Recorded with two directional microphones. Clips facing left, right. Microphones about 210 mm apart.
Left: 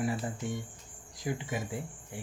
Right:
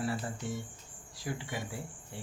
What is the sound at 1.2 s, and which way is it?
Cricket, 20° left (ahead or behind).